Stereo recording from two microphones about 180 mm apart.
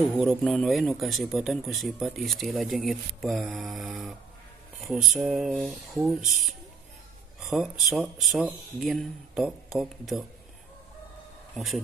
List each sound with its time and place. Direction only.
0.2 s speech: centre (ahead or behind)
11.5 s speech: centre (ahead or behind)